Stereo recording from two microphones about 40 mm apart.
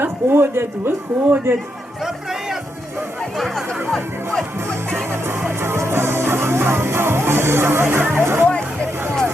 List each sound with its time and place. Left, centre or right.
0.0 s speech: right
3.3 s chatter: centre
5.6 s music: right